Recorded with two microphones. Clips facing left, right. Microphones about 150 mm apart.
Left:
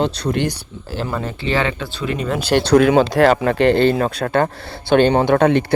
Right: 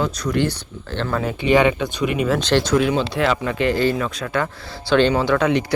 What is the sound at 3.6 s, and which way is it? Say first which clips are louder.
Speech: left 5 dB; 65° left (ahead or behind).